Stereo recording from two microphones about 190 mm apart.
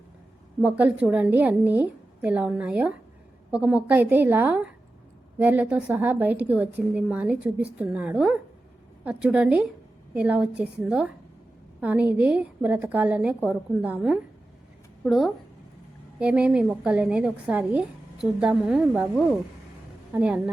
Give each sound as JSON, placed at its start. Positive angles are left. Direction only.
{"t": 0.6, "sound": "a woman's voice", "side_deg": -5}